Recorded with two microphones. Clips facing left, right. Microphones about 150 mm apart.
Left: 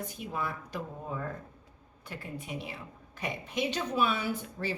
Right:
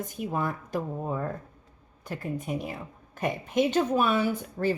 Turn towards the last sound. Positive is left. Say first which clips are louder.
# right 7 dB
turn(degrees=-50)  # may be behind; listen again after turning